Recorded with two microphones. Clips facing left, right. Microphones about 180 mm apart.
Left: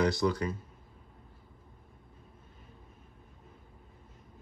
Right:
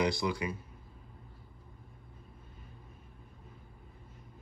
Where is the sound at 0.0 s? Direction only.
15° right (ahead or behind).